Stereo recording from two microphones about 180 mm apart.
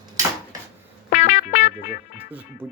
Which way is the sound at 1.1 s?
40° left (ahead or behind).